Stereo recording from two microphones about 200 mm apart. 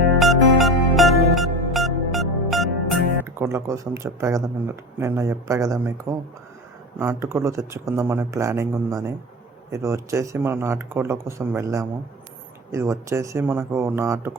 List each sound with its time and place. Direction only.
0.2 s music: centre (ahead or behind)
3.2 s speech: 15° right (ahead or behind)